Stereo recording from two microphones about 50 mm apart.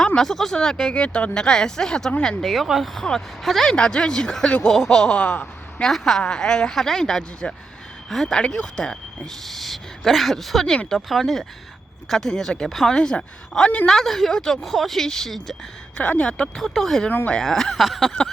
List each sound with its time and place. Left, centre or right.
0.2 s speech: centre
2.4 s speech: centre
2.9 s speech: centre
3.8 s speech: centre
5.1 s speech: left
5.8 s speech: centre
9.5 s speech: centre
12.9 s speech: centre
16.0 s speech: left
16.6 s speech: centre